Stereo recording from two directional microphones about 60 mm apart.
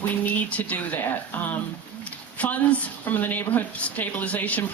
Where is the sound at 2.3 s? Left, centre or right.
Left.